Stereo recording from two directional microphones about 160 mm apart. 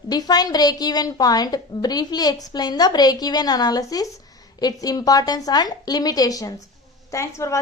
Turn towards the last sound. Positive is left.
turn(degrees=20)  # may be behind; listen again after turning